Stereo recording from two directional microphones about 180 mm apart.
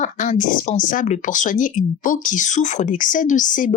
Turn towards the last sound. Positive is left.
turn(degrees=45)  # may be behind; listen again after turning